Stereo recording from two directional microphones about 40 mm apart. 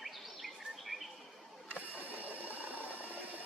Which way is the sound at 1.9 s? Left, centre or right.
Right.